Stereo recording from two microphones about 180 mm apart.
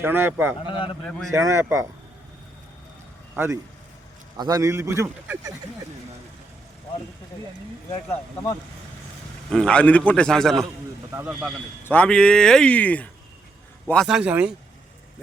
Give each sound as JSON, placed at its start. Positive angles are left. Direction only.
{"t": 0.0, "sound": "a man's voice", "side_deg": -10}
{"t": 3.3, "sound": "a man's voice", "side_deg": -15}
{"t": 9.5, "sound": "speech", "side_deg": 5}
{"t": 11.1, "sound": "a man's voice", "side_deg": -10}
{"t": 11.9, "sound": "speech", "side_deg": 5}